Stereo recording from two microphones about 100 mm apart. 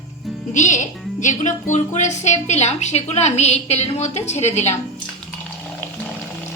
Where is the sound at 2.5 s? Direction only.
90° left.